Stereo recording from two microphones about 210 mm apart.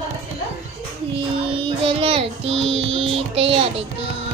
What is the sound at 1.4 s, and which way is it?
A child's voice, 25° right (ahead or behind).